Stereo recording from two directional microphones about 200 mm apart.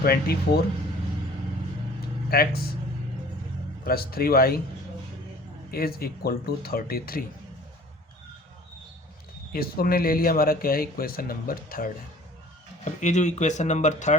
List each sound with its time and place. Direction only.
0.0 s speech: 50° left (ahead or behind)
2.3 s speech: 50° left (ahead or behind)
3.8 s speech: 50° left (ahead or behind)
5.7 s speech: 50° left (ahead or behind)
9.5 s speech: 50° left (ahead or behind)